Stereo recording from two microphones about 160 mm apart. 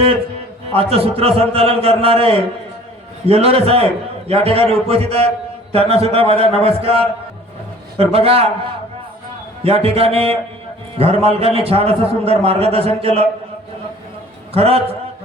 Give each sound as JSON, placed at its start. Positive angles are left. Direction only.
{"t": 0.7, "sound": "a man's voice", "side_deg": -35}
{"t": 9.6, "sound": "a man's voice", "side_deg": -35}
{"t": 14.5, "sound": "a man's voice", "side_deg": -40}